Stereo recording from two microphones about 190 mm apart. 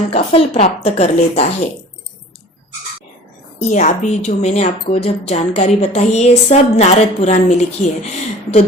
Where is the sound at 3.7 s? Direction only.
40° left (ahead or behind).